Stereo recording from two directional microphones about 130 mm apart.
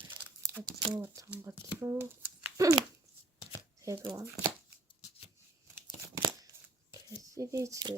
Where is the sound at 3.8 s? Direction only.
25° right (ahead or behind).